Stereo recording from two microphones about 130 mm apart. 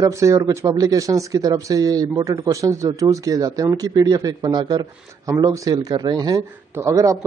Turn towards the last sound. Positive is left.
turn(degrees=-25)  # may be behind; listen again after turning